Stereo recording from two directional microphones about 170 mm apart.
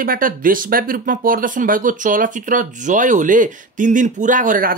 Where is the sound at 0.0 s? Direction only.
55° right (ahead or behind).